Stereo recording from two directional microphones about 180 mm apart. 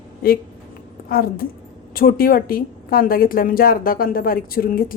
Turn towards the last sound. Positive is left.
turn(degrees=55)  # may be behind; listen again after turning